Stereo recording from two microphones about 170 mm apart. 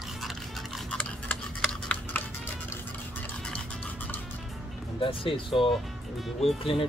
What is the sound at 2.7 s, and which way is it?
Music, 10° left (ahead or behind).